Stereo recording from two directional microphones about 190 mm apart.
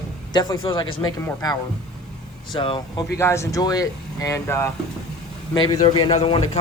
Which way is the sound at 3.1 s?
15° left (ahead or behind).